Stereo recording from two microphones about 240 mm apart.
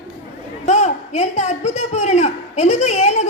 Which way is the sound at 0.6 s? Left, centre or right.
Left.